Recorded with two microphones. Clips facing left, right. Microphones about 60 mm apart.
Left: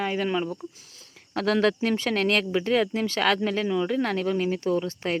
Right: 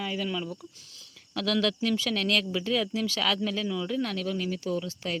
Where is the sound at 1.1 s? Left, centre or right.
Left.